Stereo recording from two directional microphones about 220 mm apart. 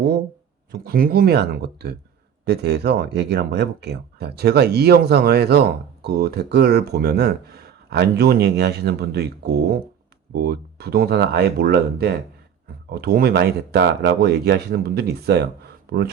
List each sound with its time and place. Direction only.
0.7 s speech: 40° right (ahead or behind)